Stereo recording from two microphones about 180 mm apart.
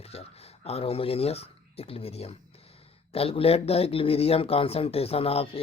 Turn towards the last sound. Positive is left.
turn(degrees=30)  # may be behind; listen again after turning